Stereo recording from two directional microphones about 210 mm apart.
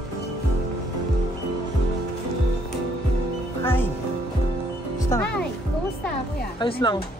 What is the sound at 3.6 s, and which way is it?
Music, 10° left (ahead or behind).